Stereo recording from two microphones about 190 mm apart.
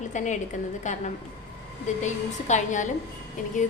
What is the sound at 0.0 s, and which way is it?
A woman's voice, 40° left (ahead or behind).